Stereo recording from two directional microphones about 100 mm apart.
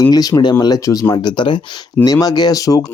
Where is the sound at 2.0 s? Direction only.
40° left (ahead or behind).